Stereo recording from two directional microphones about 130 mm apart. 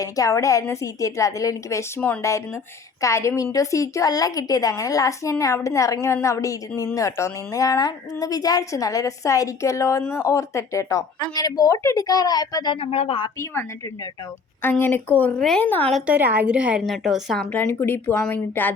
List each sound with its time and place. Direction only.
0.0 s a woman's voice: 25° left (ahead or behind); by 13.3 s 45° left (ahead or behind)
13.4 s a woman's voice: 20° left (ahead or behind)
15.4 s a woman's voice: 5° left (ahead or behind)
16.0 s a woman's voice: 15° right (ahead or behind); by 17.5 s centre (ahead or behind)
17.5 s speech: 15° left (ahead or behind)